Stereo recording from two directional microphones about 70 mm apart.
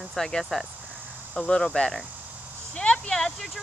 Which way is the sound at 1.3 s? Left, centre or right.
Centre.